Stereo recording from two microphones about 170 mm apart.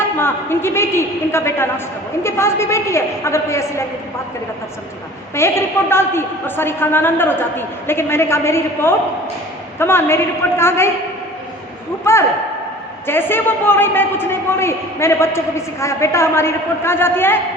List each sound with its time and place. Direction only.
0.2 s a man's voice: 15° left (ahead or behind)
5.3 s a man's voice: 15° left (ahead or behind)
12.1 s a man's voice: 15° left (ahead or behind)